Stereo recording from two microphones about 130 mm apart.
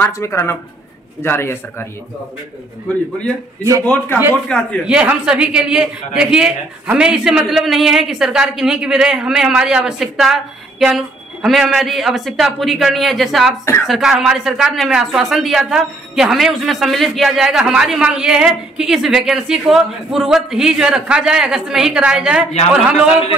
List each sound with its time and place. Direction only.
0.0 s a man's voice: 20° left (ahead or behind)
3.8 s a man's voice: 10° left (ahead or behind)
4.8 s a man's voice: 10° right (ahead or behind)